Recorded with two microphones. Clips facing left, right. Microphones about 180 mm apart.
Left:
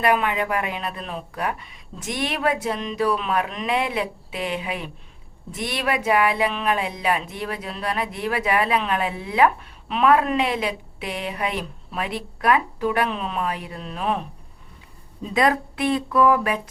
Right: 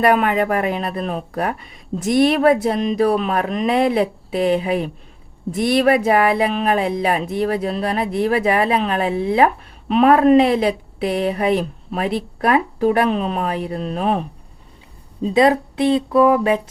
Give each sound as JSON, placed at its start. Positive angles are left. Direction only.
{"t": 0.0, "sound": "speech", "side_deg": -45}
{"t": 15.2, "sound": "speech", "side_deg": -30}